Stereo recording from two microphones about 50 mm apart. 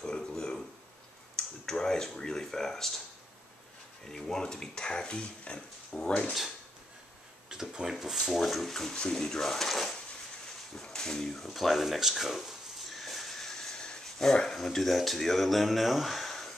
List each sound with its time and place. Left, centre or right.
0.0 s a sound: centre
1.3 s speech: centre
4.1 s speech: centre
7.4 s speech: centre
10.8 s a sound: centre
14.3 s speech: centre